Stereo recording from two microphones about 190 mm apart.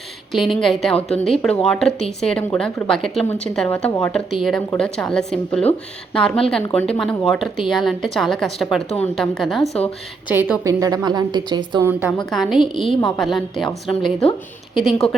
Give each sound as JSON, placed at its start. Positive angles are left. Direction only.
{"t": 0.3, "sound": "a woman's voice", "side_deg": 0}
{"t": 10.2, "sound": "a woman's voice", "side_deg": -10}
{"t": 11.9, "sound": "a woman's voice", "side_deg": -10}